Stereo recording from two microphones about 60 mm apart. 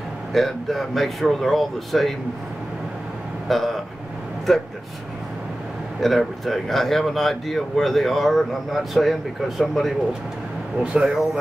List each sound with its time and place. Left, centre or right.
0.3 s speech: centre
3.4 s speech: centre
5.9 s speech: centre
10.8 s speech: centre